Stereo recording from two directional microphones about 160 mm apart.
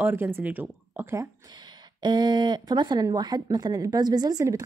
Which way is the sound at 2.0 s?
25° right (ahead or behind).